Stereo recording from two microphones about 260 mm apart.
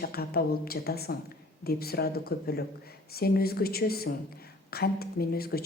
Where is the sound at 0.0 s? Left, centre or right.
Left.